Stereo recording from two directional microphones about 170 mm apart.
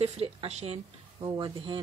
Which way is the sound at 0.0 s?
40° right (ahead or behind).